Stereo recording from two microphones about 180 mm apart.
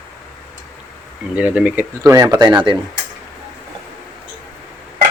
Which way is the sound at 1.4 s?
5° right (ahead or behind).